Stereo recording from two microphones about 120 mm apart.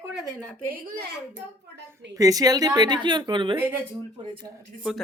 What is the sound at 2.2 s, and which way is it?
Speech, 30° right (ahead or behind).